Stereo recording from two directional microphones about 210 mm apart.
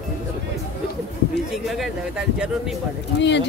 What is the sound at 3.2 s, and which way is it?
Speech, 55° left (ahead or behind).